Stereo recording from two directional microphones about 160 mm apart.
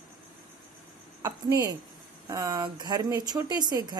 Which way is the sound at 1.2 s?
20° right (ahead or behind).